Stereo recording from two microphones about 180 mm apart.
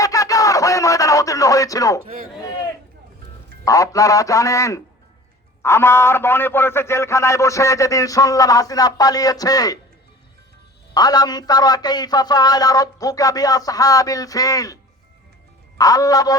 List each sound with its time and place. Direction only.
0.0 s a sound: 20° left (ahead or behind)
3.6 s a man's voice: 20° left (ahead or behind)
10.9 s a man's voice: 20° left (ahead or behind)
15.8 s a man's voice: 20° left (ahead or behind)